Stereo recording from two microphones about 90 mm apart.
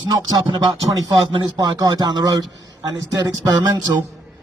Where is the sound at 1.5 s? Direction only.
45° right (ahead or behind).